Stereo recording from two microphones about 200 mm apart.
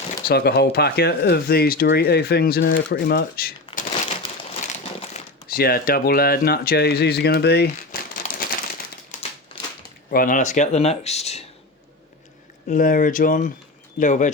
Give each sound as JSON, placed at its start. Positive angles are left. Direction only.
{"t": 0.3, "sound": "speech", "side_deg": 50}
{"t": 4.2, "sound": "a sound", "side_deg": 30}
{"t": 5.5, "sound": "speech", "side_deg": 50}
{"t": 9.1, "sound": "crumpling", "side_deg": 35}
{"t": 9.5, "sound": "a sound", "side_deg": 25}
{"t": 10.1, "sound": "speech", "side_deg": 45}
{"t": 12.6, "sound": "speech", "side_deg": 40}